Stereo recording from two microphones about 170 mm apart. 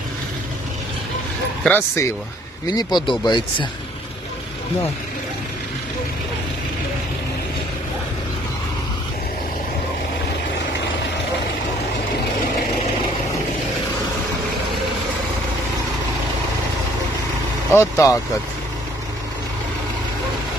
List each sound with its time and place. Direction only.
1.6 s speech: 10° left (ahead or behind)
2.6 s speech: 25° left (ahead or behind)
17.7 s speech: 15° left (ahead or behind)